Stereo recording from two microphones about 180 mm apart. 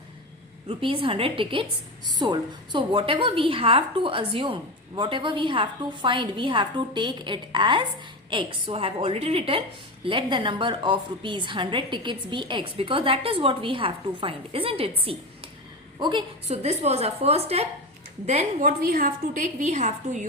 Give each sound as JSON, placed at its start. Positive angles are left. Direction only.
{"t": 0.7, "sound": "a woman's voice", "side_deg": -30}
{"t": 16.5, "sound": "a woman's voice", "side_deg": -35}
{"t": 18.6, "sound": "a woman's voice", "side_deg": -50}